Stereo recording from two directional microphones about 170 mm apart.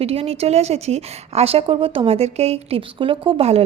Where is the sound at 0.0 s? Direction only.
35° right (ahead or behind).